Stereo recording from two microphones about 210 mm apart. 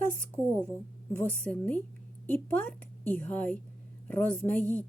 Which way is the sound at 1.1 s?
5° left (ahead or behind).